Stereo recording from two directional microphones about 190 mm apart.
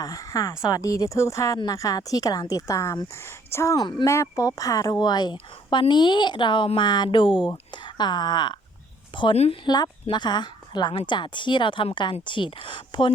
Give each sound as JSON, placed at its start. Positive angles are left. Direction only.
{"t": 0.0, "sound": "speech", "side_deg": 15}